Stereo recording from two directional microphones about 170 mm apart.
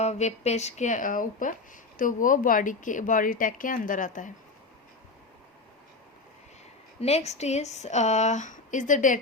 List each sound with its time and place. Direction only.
0.0 s speech: 40° left (ahead or behind)
7.0 s speech: 40° left (ahead or behind)